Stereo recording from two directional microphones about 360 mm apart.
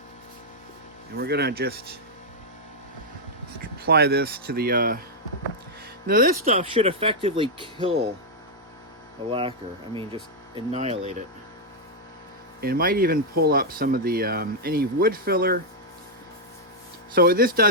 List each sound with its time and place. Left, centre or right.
1.1 s speech: right
3.6 s speech: right
6.1 s speech: right
9.3 s speech: centre
12.6 s speech: right
17.2 s speech: right